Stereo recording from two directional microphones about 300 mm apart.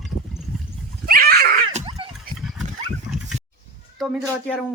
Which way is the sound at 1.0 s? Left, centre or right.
Right.